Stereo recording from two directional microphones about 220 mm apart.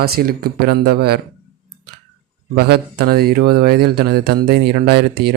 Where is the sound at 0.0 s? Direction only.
45° right (ahead or behind).